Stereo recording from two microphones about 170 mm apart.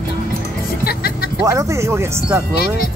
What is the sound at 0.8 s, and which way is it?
Music, 65° left (ahead or behind).